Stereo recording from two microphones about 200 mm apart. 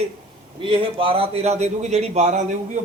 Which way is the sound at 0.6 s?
25° right (ahead or behind).